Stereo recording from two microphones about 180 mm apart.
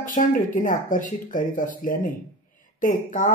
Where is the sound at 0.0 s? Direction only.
50° left (ahead or behind).